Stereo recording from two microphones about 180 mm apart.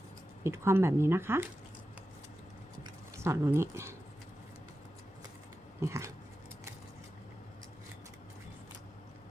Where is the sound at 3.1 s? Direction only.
15° right (ahead or behind).